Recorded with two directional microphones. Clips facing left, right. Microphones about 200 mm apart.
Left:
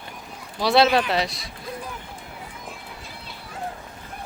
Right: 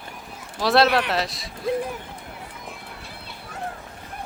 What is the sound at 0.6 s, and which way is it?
Speech, centre (ahead or behind).